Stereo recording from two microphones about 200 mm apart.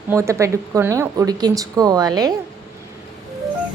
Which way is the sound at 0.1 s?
15° right (ahead or behind).